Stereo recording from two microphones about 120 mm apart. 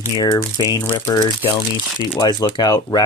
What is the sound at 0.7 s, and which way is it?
Speech, 25° left (ahead or behind).